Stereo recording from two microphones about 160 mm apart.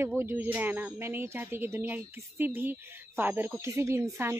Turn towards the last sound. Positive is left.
turn(degrees=-15)  # may be behind; listen again after turning